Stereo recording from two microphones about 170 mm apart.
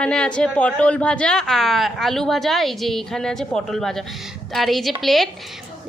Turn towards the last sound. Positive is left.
turn(degrees=0)  # may be behind; listen again after turning